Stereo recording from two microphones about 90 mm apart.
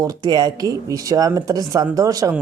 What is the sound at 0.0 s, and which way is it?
Speech, 45° right (ahead or behind).